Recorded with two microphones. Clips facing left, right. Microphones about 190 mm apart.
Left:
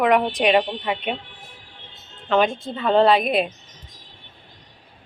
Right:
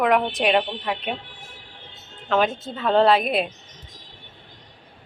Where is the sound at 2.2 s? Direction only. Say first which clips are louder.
Left 2 dB; centre (ahead or behind).